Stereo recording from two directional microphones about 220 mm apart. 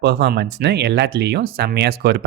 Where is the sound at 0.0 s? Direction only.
50° right (ahead or behind).